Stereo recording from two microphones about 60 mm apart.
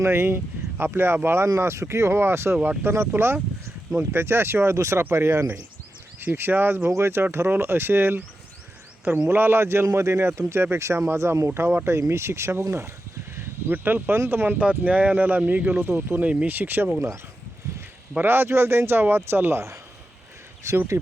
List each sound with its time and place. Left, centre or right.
0.0 s speech: right
6.1 s speech: right
9.3 s speech: right
14.6 s speech: right
15.9 s speech: right
16.2 s speech: centre
16.5 s speech: right
18.2 s speech: right
20.7 s speech: right